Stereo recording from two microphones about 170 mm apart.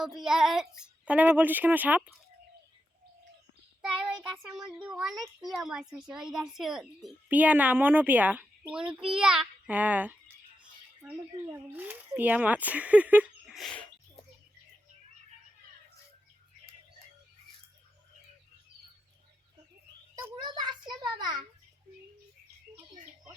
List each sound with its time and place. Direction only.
0.0 s speech: 5° right (ahead or behind)
3.8 s child singing: 5° right (ahead or behind)
4.8 s a child's voice: 5° right (ahead or behind)
20.4 s a sound: 25° right (ahead or behind)